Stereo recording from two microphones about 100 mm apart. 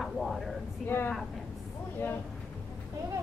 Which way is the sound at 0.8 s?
20° left (ahead or behind).